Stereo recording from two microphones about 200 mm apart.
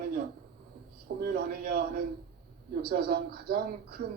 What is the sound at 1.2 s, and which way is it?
Speech, 50° right (ahead or behind).